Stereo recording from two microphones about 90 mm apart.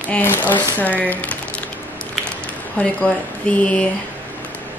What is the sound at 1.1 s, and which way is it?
Speech, 15° left (ahead or behind).